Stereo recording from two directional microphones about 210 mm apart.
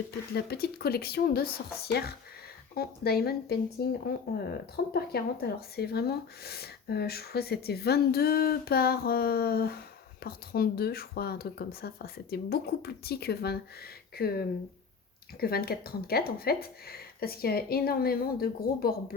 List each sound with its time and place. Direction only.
0.1 s speech: 50° left (ahead or behind)
4.9 s speech: 50° left (ahead or behind)